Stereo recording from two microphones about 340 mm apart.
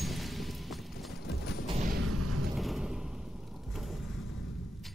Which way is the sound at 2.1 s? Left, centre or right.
Right.